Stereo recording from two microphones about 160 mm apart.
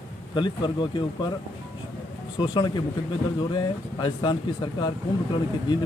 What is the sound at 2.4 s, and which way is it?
Speech, 30° left (ahead or behind).